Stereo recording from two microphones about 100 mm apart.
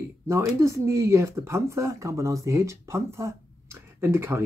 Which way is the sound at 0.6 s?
30° right (ahead or behind).